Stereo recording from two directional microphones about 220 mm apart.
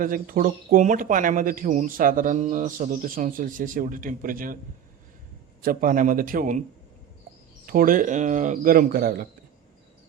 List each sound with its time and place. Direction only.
0.0 s speech: 40° right (ahead or behind)
5.6 s speech: 40° right (ahead or behind)
7.7 s speech: 40° right (ahead or behind)